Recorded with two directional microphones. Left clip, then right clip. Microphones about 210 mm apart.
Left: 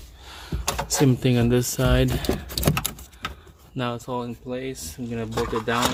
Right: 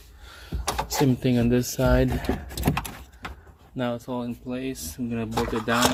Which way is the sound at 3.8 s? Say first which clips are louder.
Left 1 dB; centre (ahead or behind).